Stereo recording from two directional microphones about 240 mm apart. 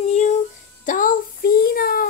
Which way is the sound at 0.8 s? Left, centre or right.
Left.